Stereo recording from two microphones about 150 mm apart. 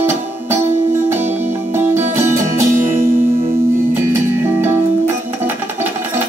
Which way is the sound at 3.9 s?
15° right (ahead or behind).